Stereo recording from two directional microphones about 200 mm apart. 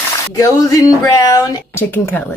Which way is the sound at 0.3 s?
15° left (ahead or behind).